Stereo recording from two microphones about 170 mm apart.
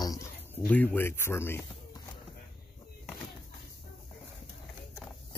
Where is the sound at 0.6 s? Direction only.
10° left (ahead or behind).